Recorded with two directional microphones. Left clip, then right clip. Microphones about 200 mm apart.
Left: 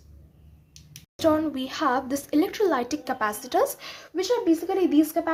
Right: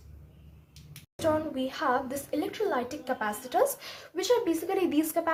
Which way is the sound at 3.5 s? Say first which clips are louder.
Even; 30° left (ahead or behind).